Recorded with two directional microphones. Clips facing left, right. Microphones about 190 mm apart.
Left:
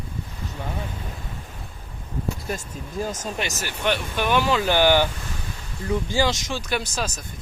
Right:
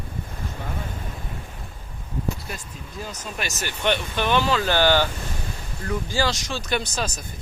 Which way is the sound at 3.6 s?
5° left (ahead or behind).